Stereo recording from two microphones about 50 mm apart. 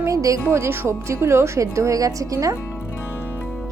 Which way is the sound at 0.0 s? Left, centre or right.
Right.